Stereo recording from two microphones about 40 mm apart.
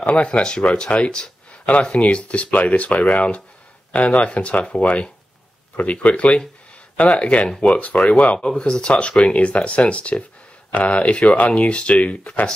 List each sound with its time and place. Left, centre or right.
0.0 s speech: left
8.4 s speech: centre